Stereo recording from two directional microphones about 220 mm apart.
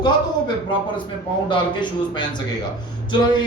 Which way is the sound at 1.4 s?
20° left (ahead or behind).